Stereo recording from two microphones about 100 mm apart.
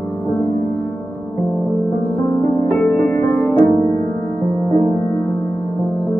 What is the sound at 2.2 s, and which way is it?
Music, 15° left (ahead or behind).